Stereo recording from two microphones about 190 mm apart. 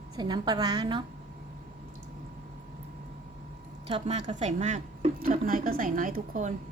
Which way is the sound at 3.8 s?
35° right (ahead or behind).